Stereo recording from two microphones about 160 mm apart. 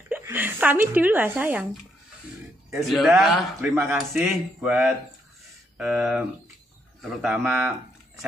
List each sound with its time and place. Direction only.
0.1 s a woman's voice: 10° right (ahead or behind)
2.8 s a man's voice: centre (ahead or behind)
3.7 s a woman's voice: 15° right (ahead or behind)
4.1 s a man's voice: 5° right (ahead or behind)